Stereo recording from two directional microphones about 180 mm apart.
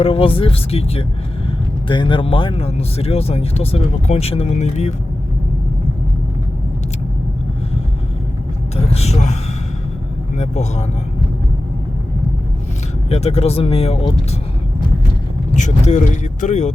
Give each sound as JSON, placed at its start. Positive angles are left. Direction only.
{"t": 0.0, "sound": "speech", "side_deg": 30}
{"t": 8.7, "sound": "vehicle", "side_deg": 35}
{"t": 10.3, "sound": "speech", "side_deg": 35}
{"t": 13.1, "sound": "speech", "side_deg": 35}
{"t": 15.5, "sound": "speech", "side_deg": 40}